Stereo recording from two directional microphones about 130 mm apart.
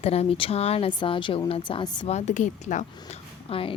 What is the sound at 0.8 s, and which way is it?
Speech, 40° left (ahead or behind).